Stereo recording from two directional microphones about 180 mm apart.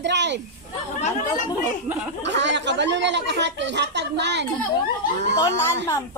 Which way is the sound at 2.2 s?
75° right (ahead or behind).